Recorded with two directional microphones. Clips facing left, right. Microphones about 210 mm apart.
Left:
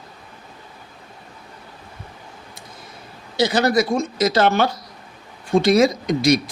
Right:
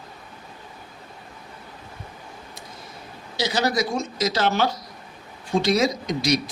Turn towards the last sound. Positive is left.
turn(degrees=55)  # may be behind; listen again after turning